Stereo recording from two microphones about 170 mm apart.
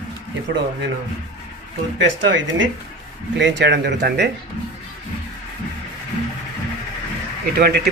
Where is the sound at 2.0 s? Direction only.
90° right.